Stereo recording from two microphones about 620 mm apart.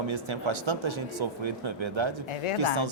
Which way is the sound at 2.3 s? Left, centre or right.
Left.